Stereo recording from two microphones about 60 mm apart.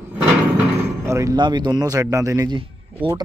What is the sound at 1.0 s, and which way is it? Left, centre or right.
Speech, right.